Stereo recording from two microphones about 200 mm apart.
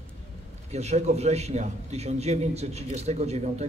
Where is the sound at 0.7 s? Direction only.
35° right (ahead or behind).